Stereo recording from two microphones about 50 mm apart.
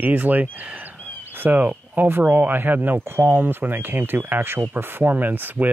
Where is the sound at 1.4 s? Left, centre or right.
Right.